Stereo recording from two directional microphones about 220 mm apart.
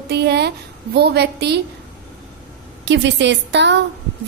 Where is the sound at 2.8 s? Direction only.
55° right (ahead or behind).